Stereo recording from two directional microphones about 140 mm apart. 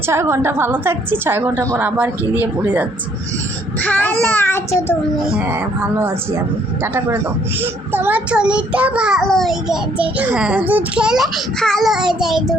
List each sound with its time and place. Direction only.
0.1 s a child's voice: 20° right (ahead or behind)
3.8 s child singing: 10° left (ahead or behind)
5.2 s speech: 5° right (ahead or behind)
5.5 s a child's voice: 15° right (ahead or behind)